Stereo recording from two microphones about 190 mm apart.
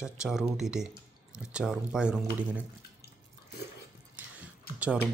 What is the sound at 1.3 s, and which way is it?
Speech, 5° right (ahead or behind).